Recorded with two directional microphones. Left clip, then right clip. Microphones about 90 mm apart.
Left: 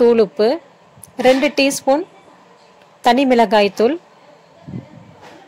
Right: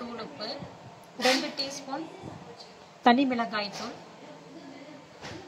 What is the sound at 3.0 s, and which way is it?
Speech, 25° left (ahead or behind).